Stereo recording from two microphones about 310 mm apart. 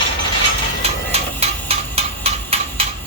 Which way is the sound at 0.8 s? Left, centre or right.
Centre.